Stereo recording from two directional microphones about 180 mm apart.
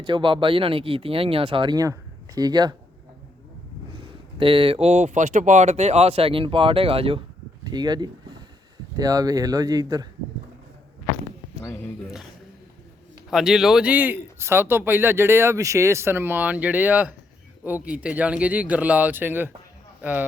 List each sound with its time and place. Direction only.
0.0 s speech: 25° right (ahead or behind)
4.4 s speech: 30° right (ahead or behind)
7.6 s a sound: 25° right (ahead or behind)
9.0 s speech: 20° right (ahead or behind)
13.3 s a man's voice: centre (ahead or behind)